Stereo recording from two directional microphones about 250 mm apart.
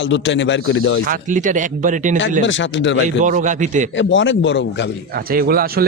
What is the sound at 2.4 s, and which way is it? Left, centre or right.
Speech, left.